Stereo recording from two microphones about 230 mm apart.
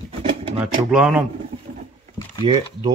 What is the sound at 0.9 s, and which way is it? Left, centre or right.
Speech, centre.